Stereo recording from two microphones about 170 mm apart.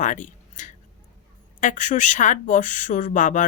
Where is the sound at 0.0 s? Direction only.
45° left (ahead or behind).